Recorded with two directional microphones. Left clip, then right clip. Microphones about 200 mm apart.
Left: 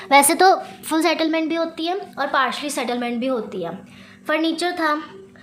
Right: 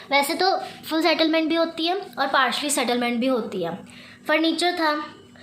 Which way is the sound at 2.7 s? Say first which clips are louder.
Right 1 dB; centre (ahead or behind).